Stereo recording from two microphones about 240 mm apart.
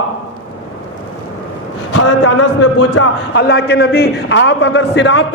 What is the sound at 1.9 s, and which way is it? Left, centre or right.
Speech, left.